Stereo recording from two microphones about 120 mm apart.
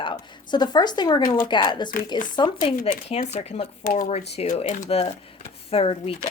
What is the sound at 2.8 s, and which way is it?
Speech, 70° left (ahead or behind).